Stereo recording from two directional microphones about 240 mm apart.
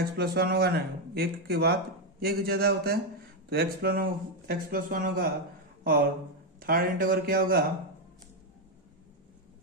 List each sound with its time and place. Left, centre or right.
0.2 s speech: right
6.6 s speech: right